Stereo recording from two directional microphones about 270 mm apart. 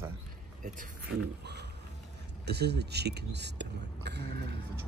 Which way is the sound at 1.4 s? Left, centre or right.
Right.